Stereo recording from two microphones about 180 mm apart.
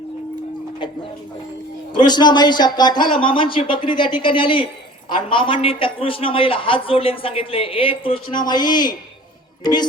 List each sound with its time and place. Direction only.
2.0 s a man's voice: 25° left (ahead or behind)